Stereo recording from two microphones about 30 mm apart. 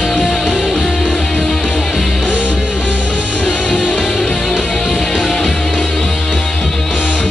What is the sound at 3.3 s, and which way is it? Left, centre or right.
Music, left.